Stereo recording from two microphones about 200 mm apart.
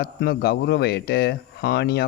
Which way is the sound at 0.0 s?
55° left (ahead or behind).